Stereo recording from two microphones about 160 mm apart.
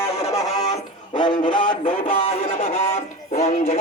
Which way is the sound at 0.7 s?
30° left (ahead or behind).